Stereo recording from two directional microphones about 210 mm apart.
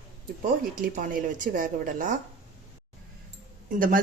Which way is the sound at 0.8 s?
40° right (ahead or behind).